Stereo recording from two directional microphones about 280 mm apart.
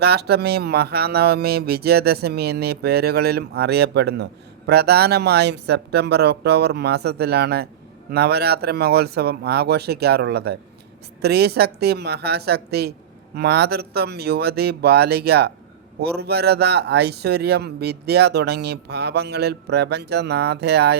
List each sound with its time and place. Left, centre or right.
0.0 s speech: right